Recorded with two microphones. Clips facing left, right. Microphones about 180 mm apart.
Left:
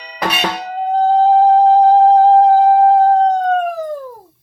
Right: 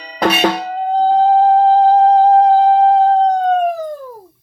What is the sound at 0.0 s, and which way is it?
Music, 45° right (ahead or behind).